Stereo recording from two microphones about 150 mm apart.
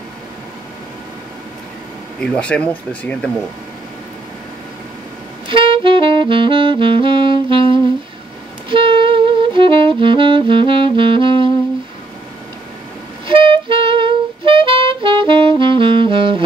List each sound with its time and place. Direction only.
2.1 s speech: 5° left (ahead or behind)
5.5 s saxophone: 35° right (ahead or behind)
13.3 s saxophone: 35° right (ahead or behind)